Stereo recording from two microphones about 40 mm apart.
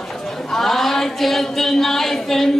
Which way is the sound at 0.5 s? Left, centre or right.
Centre.